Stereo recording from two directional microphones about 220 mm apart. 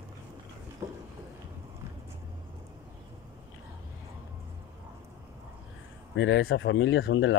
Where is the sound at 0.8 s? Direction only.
20° right (ahead or behind).